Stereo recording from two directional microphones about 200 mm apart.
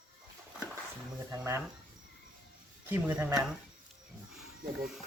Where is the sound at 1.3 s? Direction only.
15° right (ahead or behind).